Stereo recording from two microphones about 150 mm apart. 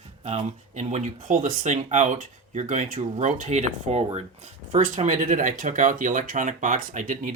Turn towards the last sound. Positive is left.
turn(degrees=-60)  # may be behind; listen again after turning